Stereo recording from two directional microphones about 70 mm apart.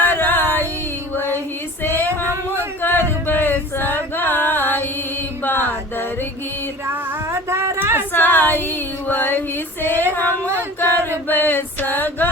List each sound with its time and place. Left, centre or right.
0.0 s music: left
1.8 s female singing: left
2.8 s a sound: left
6.9 s a sound: right
7.8 s female singing: right
8.1 s female singing: left
11.3 s music: left